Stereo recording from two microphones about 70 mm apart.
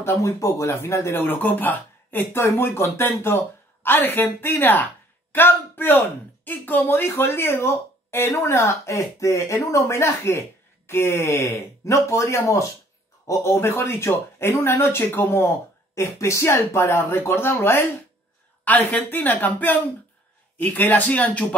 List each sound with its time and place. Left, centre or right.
0.0 s speech: left
18.6 s a woman's voice: left